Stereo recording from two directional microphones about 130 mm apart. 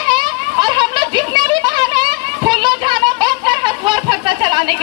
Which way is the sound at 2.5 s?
40° right (ahead or behind).